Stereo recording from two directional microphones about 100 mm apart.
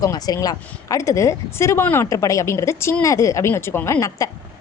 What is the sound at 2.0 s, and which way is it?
A woman's voice, 35° left (ahead or behind).